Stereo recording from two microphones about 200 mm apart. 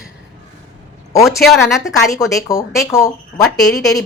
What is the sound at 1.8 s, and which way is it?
Speech, 15° left (ahead or behind).